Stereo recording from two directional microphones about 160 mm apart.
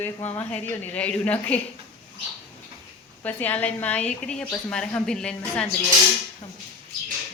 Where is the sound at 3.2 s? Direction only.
10° left (ahead or behind).